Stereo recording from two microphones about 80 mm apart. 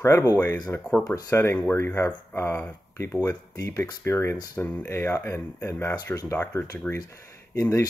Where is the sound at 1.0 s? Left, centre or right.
Left.